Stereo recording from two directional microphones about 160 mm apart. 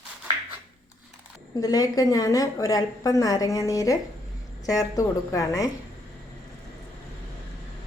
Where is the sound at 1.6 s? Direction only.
25° left (ahead or behind).